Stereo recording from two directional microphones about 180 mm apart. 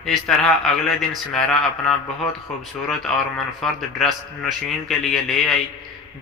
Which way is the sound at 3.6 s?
Centre (ahead or behind).